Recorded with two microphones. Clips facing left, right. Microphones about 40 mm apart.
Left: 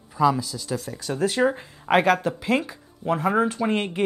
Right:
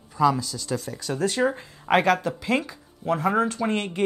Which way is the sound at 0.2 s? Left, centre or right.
Centre.